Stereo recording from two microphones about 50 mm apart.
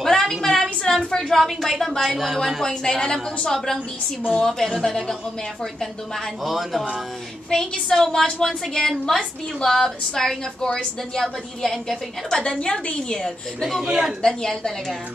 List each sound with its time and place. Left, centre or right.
0.0 s a sound: centre
2.6 s a woman's voice: centre
7.9 s a woman's voice: centre
13.8 s speech: centre
14.2 s a woman's voice: centre